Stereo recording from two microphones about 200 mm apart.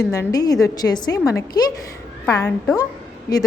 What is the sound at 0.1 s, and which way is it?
A woman's voice, 15° left (ahead or behind).